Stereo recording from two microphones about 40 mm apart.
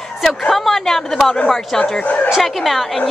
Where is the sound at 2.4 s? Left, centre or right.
Centre.